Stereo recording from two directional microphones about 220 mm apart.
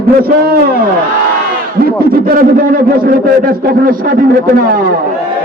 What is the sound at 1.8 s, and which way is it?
A man's voice, 40° right (ahead or behind).